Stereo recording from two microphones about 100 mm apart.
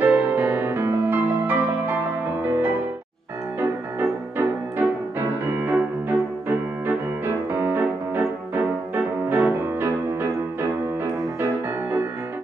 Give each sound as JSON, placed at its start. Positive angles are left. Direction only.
{"t": 0.0, "sound": "music", "side_deg": -20}
{"t": 4.0, "sound": "music", "side_deg": -20}